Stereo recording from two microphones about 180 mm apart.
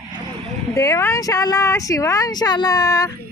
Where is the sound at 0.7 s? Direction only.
15° left (ahead or behind).